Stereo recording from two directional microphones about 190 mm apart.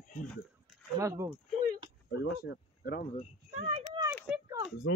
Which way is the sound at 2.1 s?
65° left (ahead or behind).